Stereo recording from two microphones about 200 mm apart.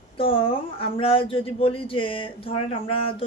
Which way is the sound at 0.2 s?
25° left (ahead or behind).